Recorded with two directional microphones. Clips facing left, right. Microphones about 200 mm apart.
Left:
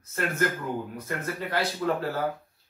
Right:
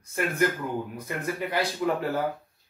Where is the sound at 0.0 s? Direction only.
15° right (ahead or behind).